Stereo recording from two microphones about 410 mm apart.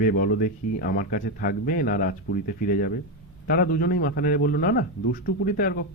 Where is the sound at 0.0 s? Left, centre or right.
Left.